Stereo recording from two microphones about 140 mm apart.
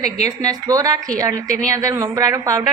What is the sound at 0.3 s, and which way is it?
Speech, 25° right (ahead or behind).